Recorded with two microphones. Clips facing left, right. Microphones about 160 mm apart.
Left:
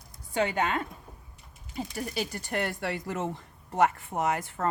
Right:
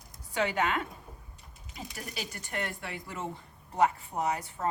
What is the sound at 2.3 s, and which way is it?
Speech, 35° left (ahead or behind).